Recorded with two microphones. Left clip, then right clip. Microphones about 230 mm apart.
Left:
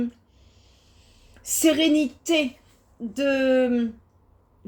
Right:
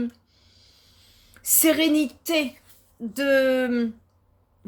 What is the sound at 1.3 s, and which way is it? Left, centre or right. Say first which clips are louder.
A woman's voice: even; right.